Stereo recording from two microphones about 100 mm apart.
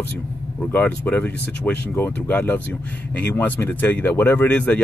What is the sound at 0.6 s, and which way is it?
Speech, 15° left (ahead or behind).